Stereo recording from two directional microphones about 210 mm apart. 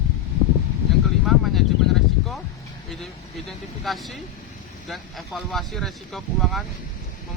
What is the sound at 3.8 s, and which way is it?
Speech, centre (ahead or behind).